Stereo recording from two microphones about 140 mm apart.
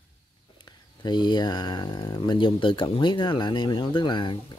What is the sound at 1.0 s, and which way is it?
Speech, 30° left (ahead or behind).